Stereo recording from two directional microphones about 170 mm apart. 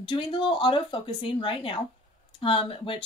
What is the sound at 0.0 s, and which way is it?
A woman's voice, 30° left (ahead or behind).